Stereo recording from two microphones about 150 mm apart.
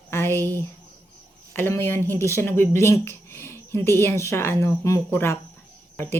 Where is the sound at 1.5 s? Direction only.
15° left (ahead or behind).